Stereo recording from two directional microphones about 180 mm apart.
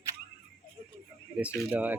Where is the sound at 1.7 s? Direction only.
10° right (ahead or behind).